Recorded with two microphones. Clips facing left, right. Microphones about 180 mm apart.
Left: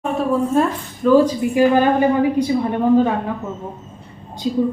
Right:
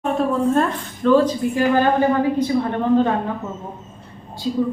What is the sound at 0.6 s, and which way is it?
A woman's voice, 10° left (ahead or behind).